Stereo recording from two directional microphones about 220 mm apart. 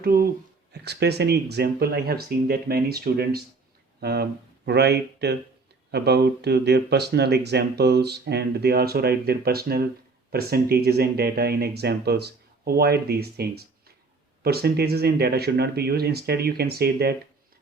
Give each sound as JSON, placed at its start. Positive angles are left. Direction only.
{"t": 0.0, "sound": "speech", "side_deg": -45}